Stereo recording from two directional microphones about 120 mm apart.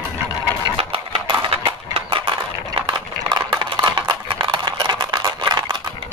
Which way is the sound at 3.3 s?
40° right (ahead or behind).